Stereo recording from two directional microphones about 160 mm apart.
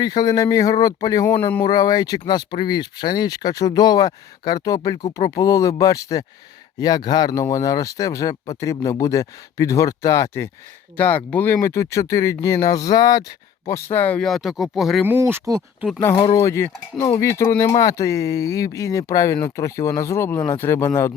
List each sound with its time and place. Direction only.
0.0 s speech: 25° left (ahead or behind)
1.4 s speech: 10° left (ahead or behind)
1.6 s speech: 25° left (ahead or behind); by 15.0 s centre (ahead or behind)
15.0 s speech: 15° right (ahead or behind)
16.1 s speech: 25° left (ahead or behind)